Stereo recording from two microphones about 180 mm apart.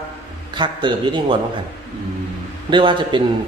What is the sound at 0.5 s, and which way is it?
Speech, 25° right (ahead or behind).